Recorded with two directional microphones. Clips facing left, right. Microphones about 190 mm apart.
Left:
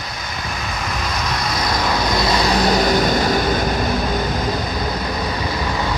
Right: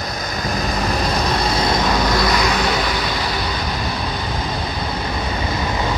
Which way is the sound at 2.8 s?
45° left (ahead or behind).